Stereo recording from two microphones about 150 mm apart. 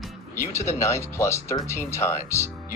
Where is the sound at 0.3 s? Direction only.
20° left (ahead or behind).